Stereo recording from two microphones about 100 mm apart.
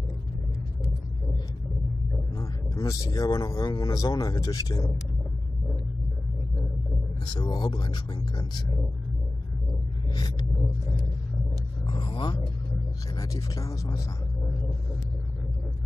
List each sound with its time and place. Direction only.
2.3 s speech: 35° left (ahead or behind)
7.3 s speech: 50° left (ahead or behind)
11.9 s speech: 55° left (ahead or behind)
13.1 s speech: 35° left (ahead or behind)